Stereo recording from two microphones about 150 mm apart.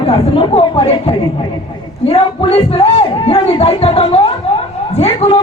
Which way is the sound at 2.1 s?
40° left (ahead or behind).